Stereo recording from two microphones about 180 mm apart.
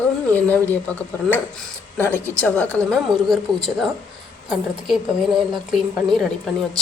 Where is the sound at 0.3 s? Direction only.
10° left (ahead or behind).